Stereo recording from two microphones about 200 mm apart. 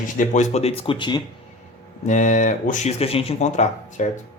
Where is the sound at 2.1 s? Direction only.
40° left (ahead or behind).